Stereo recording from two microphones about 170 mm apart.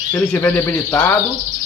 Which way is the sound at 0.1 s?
15° left (ahead or behind).